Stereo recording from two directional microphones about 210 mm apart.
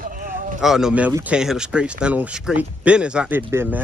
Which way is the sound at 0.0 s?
40° right (ahead or behind).